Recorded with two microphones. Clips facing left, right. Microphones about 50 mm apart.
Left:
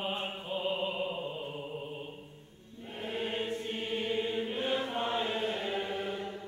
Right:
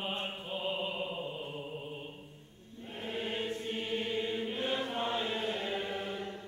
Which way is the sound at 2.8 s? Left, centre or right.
Centre.